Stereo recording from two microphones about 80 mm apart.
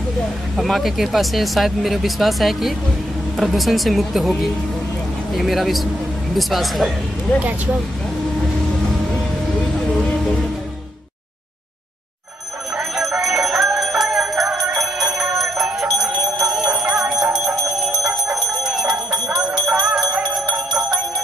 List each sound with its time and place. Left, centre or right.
0.6 s speech: centre
7.4 s speech: right
9.8 s music: centre
12.7 s music: centre
16.2 s bell: centre
16.7 s music: centre
18.0 s bell: centre
20.2 s music: centre